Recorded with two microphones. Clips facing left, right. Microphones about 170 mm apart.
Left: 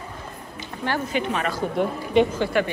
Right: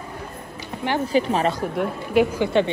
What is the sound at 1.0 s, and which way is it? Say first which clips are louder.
Speech: right 5 dB; 35° right (ahead or behind).